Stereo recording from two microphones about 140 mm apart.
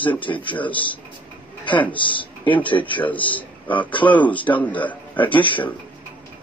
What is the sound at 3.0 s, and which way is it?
A man's voice, 10° left (ahead or behind).